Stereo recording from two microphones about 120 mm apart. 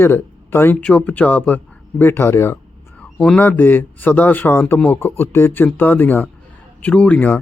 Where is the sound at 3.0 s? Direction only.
10° left (ahead or behind).